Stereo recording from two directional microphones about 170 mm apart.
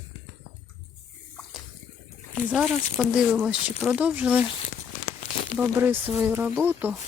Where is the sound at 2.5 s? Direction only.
Centre (ahead or behind).